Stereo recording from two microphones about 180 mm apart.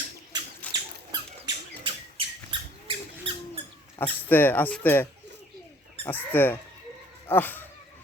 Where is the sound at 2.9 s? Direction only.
30° right (ahead or behind).